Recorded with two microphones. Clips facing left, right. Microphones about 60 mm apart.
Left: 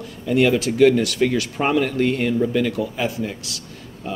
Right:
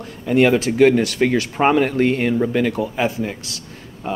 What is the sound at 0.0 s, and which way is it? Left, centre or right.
Speech, right.